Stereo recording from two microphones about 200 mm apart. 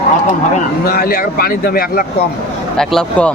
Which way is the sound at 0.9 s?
50° left (ahead or behind).